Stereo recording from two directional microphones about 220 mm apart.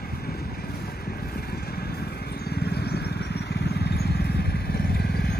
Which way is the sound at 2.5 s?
50° left (ahead or behind).